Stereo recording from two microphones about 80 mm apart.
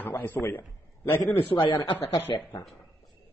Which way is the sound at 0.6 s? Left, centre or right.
Left.